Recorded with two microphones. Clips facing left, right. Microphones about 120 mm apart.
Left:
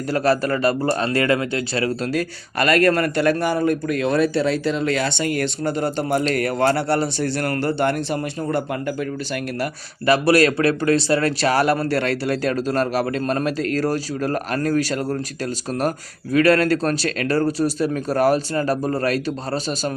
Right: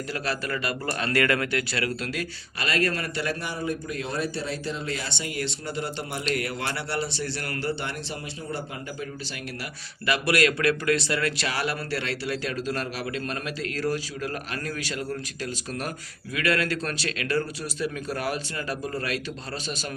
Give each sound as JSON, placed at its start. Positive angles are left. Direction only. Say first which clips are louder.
{"t": 0.1, "sound": "speech", "louder": "left 13 dB", "side_deg": 40}
{"t": 2.6, "sound": "a man's voice", "louder": "left 10 dB", "side_deg": 55}
{"t": 10.1, "sound": "speech", "louder": "left 8 dB", "side_deg": 35}